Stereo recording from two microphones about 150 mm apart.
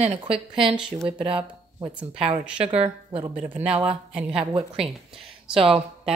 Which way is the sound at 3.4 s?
10° right (ahead or behind).